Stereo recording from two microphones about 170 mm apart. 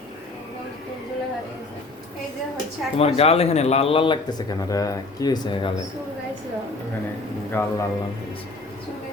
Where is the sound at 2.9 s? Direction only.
35° left (ahead or behind).